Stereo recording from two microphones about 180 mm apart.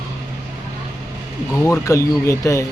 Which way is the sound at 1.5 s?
15° left (ahead or behind).